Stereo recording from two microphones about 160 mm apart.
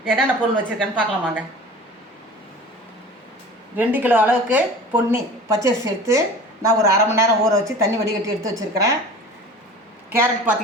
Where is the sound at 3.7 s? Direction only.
10° right (ahead or behind).